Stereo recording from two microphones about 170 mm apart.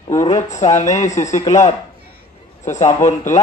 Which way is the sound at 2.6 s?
45° left (ahead or behind).